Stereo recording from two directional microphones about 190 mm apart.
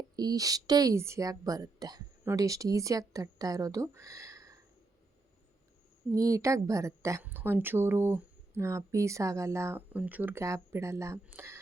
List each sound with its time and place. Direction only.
0.2 s a woman's voice: 20° right (ahead or behind)
6.1 s a woman's voice: 15° right (ahead or behind)